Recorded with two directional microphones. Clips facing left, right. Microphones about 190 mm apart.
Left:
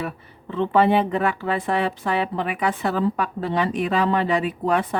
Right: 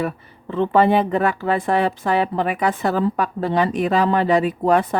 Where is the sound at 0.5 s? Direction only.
45° right (ahead or behind).